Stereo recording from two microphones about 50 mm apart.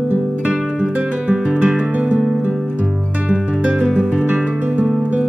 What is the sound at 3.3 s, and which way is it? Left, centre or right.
Music, right.